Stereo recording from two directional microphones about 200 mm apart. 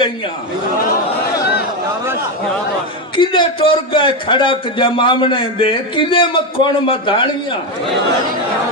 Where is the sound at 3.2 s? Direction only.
25° left (ahead or behind).